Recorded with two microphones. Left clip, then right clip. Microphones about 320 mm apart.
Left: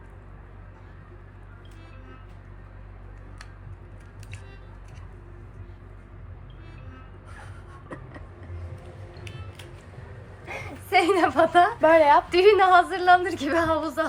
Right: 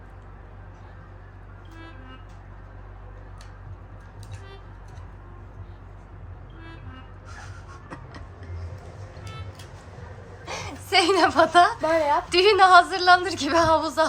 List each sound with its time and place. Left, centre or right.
10.4 s a sound: centre
11.8 s a woman's voice: left
12.3 s a woman's voice: centre